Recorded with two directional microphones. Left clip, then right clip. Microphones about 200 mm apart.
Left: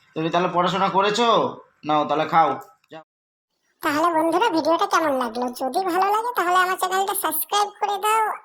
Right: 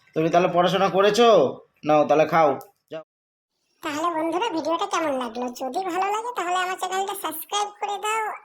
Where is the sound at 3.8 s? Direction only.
20° left (ahead or behind).